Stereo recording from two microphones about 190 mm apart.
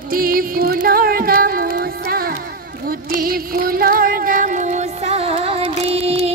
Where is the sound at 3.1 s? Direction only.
50° right (ahead or behind).